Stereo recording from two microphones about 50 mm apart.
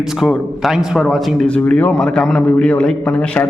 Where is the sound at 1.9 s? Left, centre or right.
Centre.